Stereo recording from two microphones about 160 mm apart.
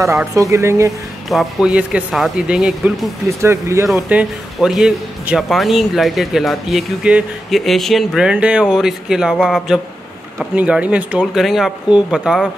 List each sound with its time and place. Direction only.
0.3 s speech: 20° right (ahead or behind)
1.3 s speech: centre (ahead or behind)
3.4 s speech: 20° right (ahead or behind)
3.9 s speech: 5° right (ahead or behind)